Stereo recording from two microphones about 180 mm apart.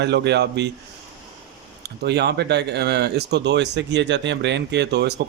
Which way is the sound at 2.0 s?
65° right (ahead or behind).